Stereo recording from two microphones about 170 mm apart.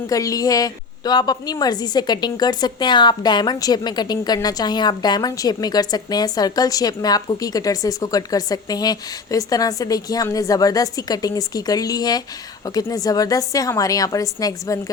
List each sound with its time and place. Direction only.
0.1 s a woman's voice: 20° left (ahead or behind)